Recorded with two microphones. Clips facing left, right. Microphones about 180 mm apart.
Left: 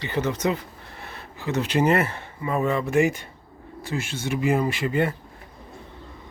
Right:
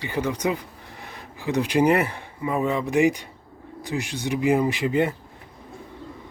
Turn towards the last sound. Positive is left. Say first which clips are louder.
# right 2 dB
turn(degrees=-20)  # may be behind; listen again after turning